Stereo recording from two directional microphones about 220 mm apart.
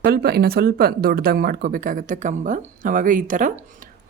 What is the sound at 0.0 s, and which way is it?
Speech, 45° right (ahead or behind).